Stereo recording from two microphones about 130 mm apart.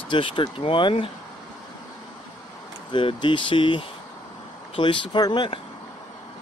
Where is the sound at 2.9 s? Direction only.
40° left (ahead or behind).